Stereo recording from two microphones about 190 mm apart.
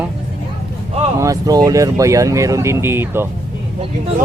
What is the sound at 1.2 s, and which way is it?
Speech, 20° right (ahead or behind).